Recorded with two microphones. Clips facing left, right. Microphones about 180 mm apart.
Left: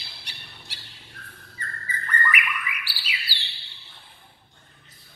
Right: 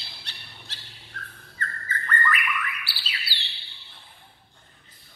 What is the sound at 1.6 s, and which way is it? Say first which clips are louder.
Bird: right 3 dB; 10° left (ahead or behind).